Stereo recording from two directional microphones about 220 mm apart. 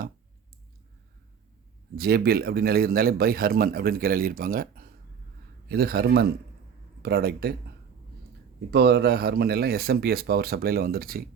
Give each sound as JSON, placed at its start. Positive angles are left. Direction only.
{"t": 2.0, "sound": "a man's voice", "side_deg": -45}
{"t": 8.7, "sound": "a man's voice", "side_deg": -45}